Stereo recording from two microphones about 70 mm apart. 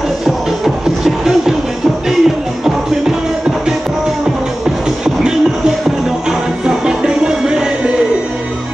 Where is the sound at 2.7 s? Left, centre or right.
Centre.